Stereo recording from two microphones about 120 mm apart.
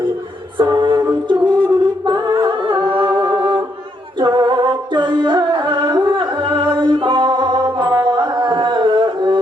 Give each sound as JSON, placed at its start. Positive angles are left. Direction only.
{"t": 0.5, "sound": "a capella", "side_deg": -35}
{"t": 1.3, "sound": "singing", "side_deg": -40}
{"t": 4.2, "sound": "music", "side_deg": -40}